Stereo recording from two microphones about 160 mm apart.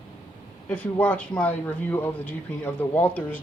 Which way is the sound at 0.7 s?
10° left (ahead or behind).